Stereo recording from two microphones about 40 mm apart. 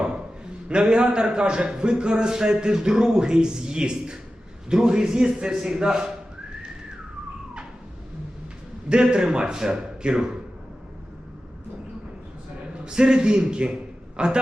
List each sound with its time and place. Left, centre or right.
0.7 s a man's voice: right
8.9 s a man's voice: right
12.7 s a man's voice: right